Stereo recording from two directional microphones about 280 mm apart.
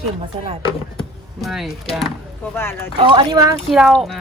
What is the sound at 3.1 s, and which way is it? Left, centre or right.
Speech, centre.